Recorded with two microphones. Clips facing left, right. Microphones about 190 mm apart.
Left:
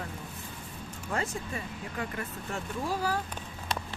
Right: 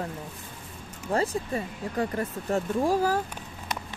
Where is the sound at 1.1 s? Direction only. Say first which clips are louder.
Right 7 dB; 35° right (ahead or behind).